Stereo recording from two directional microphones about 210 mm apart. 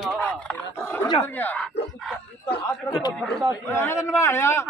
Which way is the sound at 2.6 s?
20° left (ahead or behind).